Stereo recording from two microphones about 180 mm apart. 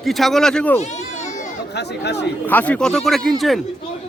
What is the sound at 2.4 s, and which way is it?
Speech, 10° left (ahead or behind).